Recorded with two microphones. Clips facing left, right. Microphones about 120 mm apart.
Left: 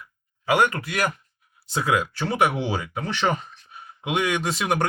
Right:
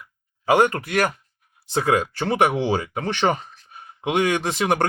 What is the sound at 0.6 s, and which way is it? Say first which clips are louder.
Speech: right 3 dB; 45° right (ahead or behind).